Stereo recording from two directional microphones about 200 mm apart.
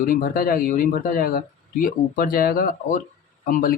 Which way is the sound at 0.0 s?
45° left (ahead or behind).